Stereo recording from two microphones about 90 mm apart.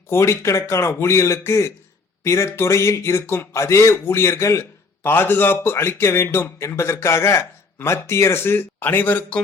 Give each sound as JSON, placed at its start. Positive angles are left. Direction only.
{"t": 0.1, "sound": "a man's voice", "side_deg": 30}